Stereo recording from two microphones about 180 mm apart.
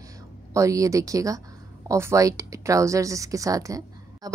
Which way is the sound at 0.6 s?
15° right (ahead or behind).